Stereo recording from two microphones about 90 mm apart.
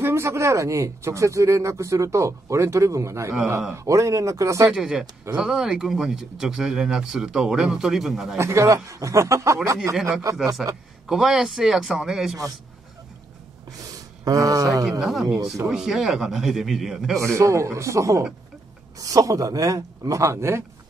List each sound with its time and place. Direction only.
0.0 s speech: 30° right (ahead or behind)
4.6 s speech: 5° right (ahead or behind)
8.4 s speech: 30° right (ahead or behind)
11.1 s speech: 5° right (ahead or behind)
13.7 s speech: 45° right (ahead or behind)
14.9 s speech: 5° right (ahead or behind)
17.4 s speech: 35° right (ahead or behind)